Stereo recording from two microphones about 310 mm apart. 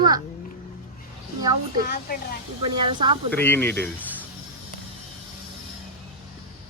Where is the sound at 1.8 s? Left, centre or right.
Left.